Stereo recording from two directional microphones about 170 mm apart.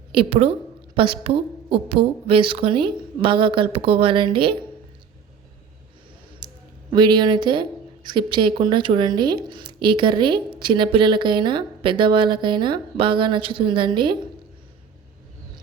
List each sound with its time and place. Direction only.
0.1 s a woman's voice: 30° right (ahead or behind)
6.4 s a sound: 25° right (ahead or behind)
6.9 s speech: 25° right (ahead or behind)